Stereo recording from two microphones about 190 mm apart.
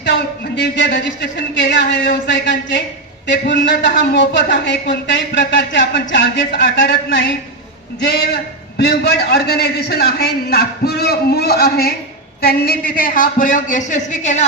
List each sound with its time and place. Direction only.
0.0 s a man's voice: 70° left (ahead or behind)
8.0 s a man's voice: 55° left (ahead or behind); by 14.4 s 40° left (ahead or behind)